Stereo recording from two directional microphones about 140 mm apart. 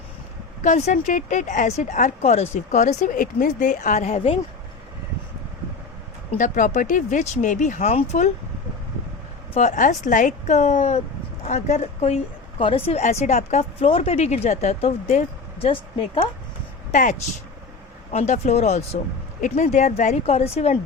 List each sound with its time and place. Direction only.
0.6 s speech: 60° left (ahead or behind)
6.3 s speech: 65° left (ahead or behind)
9.6 s a woman's voice: 60° left (ahead or behind)
15.0 s speech: 65° left (ahead or behind)
15.6 s speech: 40° left (ahead or behind)
16.9 s speech: 65° left (ahead or behind)
18.1 s a woman's voice: 50° left (ahead or behind)
19.4 s speech: 70° left (ahead or behind); by 20.7 s 50° left (ahead or behind)